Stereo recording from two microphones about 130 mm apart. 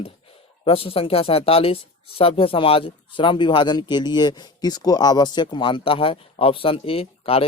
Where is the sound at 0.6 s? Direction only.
45° left (ahead or behind).